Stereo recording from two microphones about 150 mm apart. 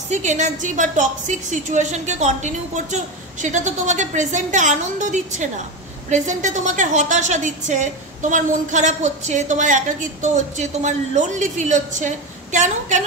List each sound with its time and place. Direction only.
0.1 s a woman's voice: 55° right (ahead or behind)